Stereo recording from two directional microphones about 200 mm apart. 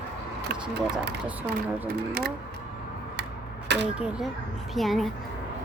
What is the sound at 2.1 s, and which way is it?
Speech, 50° right (ahead or behind).